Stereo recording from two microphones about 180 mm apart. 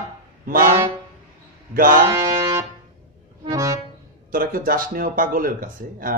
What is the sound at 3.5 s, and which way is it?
Accordion, 20° right (ahead or behind).